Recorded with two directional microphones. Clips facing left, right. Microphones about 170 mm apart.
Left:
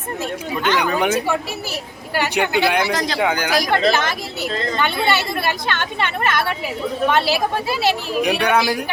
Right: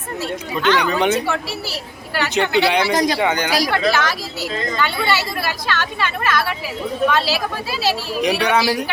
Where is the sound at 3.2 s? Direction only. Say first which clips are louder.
Right 1 dB; 5° left (ahead or behind).